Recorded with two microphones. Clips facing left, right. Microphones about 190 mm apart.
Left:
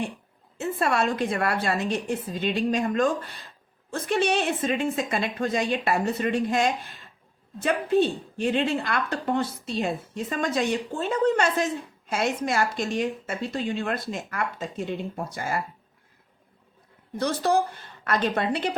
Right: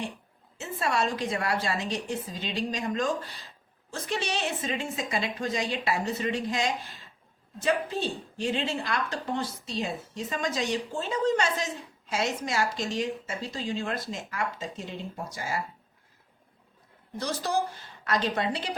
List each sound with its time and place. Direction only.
0.6 s a woman's voice: 55° left (ahead or behind)
17.2 s a woman's voice: 60° left (ahead or behind)